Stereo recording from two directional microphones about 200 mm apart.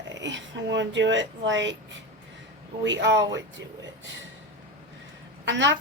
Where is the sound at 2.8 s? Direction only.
65° right (ahead or behind).